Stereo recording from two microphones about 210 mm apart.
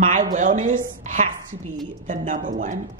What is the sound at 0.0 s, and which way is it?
Speech, 40° right (ahead or behind).